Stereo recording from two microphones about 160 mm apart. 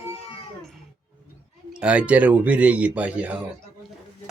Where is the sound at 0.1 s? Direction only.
35° left (ahead or behind).